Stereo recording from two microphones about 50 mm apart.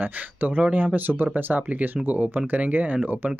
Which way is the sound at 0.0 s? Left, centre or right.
Right.